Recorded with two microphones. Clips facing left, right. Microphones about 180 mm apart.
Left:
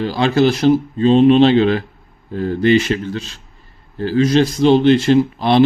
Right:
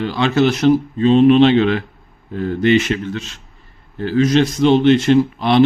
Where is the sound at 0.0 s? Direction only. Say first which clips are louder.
Left 1 dB; 35° left (ahead or behind).